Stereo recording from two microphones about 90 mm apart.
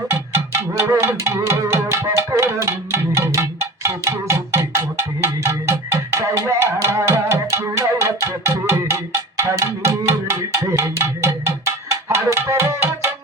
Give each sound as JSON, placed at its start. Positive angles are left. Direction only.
{"t": 0.7, "sound": "music", "side_deg": -30}
{"t": 11.4, "sound": "tabla", "side_deg": -30}